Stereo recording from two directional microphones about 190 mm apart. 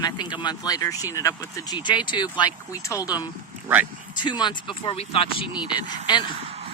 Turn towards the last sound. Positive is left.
turn(degrees=25)  # may be behind; listen again after turning